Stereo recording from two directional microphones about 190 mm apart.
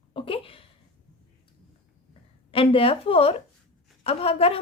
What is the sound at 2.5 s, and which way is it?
A woman's voice, 30° left (ahead or behind).